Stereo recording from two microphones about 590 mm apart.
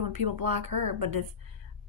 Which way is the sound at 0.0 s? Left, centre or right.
Right.